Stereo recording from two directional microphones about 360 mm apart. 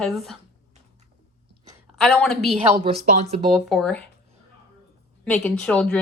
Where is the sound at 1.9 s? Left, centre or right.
Centre.